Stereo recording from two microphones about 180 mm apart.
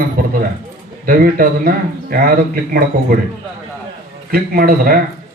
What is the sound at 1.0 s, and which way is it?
A man's voice, 50° right (ahead or behind).